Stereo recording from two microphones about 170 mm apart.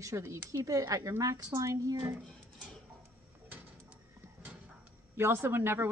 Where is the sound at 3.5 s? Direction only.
10° right (ahead or behind).